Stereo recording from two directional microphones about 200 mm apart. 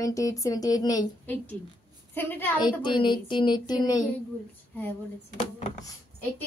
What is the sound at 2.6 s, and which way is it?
A woman's voice, 25° left (ahead or behind).